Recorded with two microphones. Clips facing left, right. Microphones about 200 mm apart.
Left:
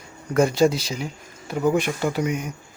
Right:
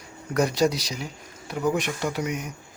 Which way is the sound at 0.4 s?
Centre (ahead or behind).